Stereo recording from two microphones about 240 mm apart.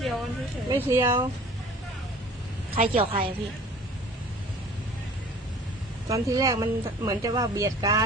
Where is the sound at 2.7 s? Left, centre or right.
Right.